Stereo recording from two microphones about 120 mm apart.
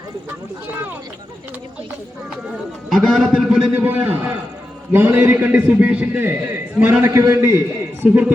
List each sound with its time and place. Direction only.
2.9 s a man's voice: 5° right (ahead or behind)
3.8 s a man's voice: 15° right (ahead or behind)
7.0 s a man's voice: 25° right (ahead or behind)
8.0 s a man's voice: 15° right (ahead or behind)